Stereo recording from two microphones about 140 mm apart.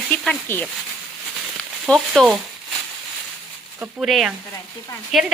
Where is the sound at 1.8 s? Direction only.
Centre (ahead or behind).